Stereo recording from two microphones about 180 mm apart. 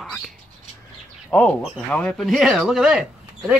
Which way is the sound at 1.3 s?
10° left (ahead or behind).